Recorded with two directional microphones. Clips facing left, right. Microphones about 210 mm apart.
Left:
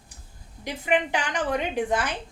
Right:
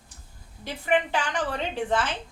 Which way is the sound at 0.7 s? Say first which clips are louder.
Even; 15° left (ahead or behind).